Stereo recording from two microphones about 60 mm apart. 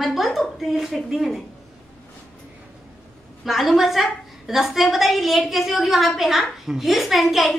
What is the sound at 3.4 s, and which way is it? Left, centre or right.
A woman's voice, centre.